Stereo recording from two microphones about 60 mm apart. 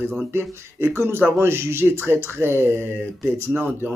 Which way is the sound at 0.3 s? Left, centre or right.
Right.